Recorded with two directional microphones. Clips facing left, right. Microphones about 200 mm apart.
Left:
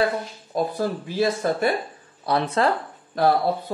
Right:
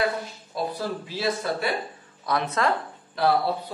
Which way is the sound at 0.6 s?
50° left (ahead or behind).